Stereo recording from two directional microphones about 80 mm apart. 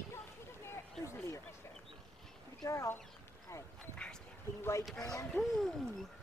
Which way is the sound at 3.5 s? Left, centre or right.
Left.